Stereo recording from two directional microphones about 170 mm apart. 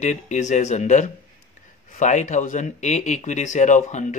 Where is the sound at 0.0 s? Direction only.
45° left (ahead or behind).